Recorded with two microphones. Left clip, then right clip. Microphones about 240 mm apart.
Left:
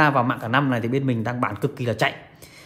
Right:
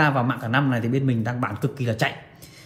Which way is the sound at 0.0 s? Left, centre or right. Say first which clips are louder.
Left 3 dB; left.